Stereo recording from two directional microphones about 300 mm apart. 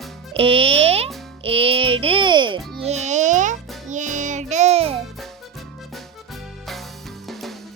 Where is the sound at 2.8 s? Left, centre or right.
Right.